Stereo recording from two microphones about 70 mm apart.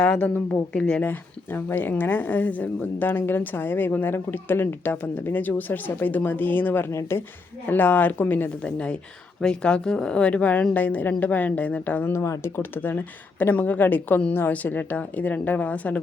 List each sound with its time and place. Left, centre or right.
0.0 s speech: centre
1.0 s speech: left
7.7 s speech: left
12.1 s speech: left
12.5 s speech: left